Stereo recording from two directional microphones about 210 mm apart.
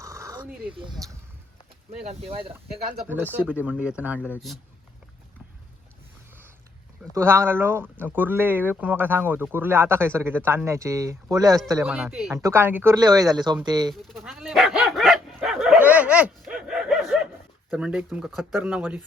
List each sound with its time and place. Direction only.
0.0 s dog: 15° right (ahead or behind)
1.9 s speech: 30° right (ahead or behind)
3.0 s speech: 10° right (ahead or behind)
4.2 s speech: 10° left (ahead or behind)
7.1 s speech: 10° right (ahead or behind)
11.8 s speech: 5° right (ahead or behind)
12.3 s speech: 15° right (ahead or behind)
13.9 s dog: centre (ahead or behind)
17.7 s speech: 5° right (ahead or behind)